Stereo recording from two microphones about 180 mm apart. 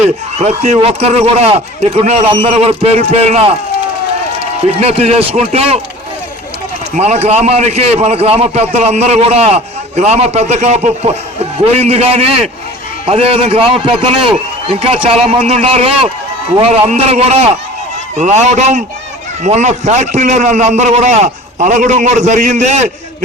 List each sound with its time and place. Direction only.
0.3 s a man's voice: 40° right (ahead or behind)
4.7 s a man's voice: 35° right (ahead or behind)
6.9 s a man's voice: 35° right (ahead or behind)